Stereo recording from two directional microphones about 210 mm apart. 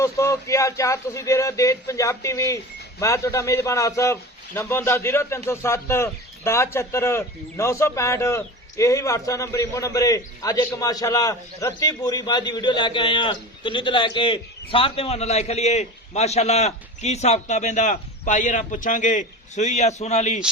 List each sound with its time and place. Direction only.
0.0 s a man's voice: 15° left (ahead or behind); by 20.4 s 35° left (ahead or behind)